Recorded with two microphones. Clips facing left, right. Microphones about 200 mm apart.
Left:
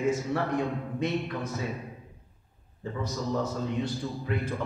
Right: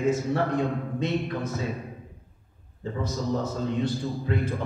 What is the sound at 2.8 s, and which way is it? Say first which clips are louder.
A man's voice: right 3 dB; 25° right (ahead or behind).